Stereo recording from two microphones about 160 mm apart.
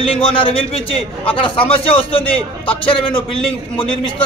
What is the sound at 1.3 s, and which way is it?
A man's voice, 35° left (ahead or behind).